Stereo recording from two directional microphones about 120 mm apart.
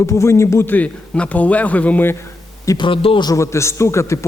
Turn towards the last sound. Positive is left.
turn(degrees=25)  # may be behind; listen again after turning